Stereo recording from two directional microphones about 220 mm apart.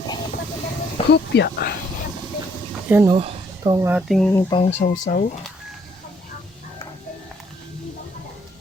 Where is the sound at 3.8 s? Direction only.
5° right (ahead or behind).